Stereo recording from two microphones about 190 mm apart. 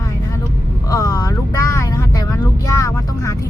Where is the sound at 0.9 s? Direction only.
15° left (ahead or behind).